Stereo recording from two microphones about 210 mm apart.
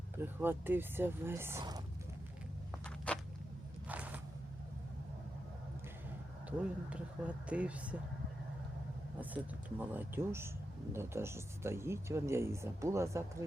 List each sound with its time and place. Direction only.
0.2 s speech: 10° right (ahead or behind)
2.7 s walk: 5° left (ahead or behind)
3.8 s a sound: 5° right (ahead or behind)
6.6 s speech: 5° right (ahead or behind)
9.3 s speech: 10° right (ahead or behind)